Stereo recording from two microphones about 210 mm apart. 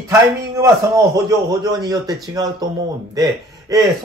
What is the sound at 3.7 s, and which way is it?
Speech, 15° right (ahead or behind).